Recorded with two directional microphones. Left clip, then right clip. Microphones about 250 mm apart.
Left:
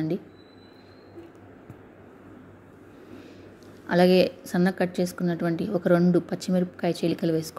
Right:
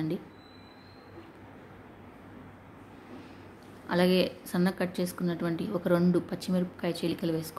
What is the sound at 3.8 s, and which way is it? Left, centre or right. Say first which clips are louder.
A woman's voice: left 6 dB; centre.